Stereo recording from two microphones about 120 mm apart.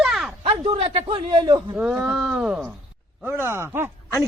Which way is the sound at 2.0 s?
Centre (ahead or behind).